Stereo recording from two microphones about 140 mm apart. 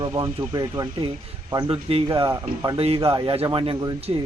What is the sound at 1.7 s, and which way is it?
Speech, 40° right (ahead or behind).